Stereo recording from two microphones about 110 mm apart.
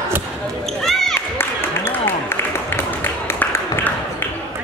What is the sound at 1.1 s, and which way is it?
Applause, 20° left (ahead or behind).